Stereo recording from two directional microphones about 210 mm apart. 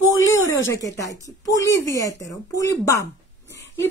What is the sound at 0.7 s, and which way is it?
A woman's voice, 15° left (ahead or behind).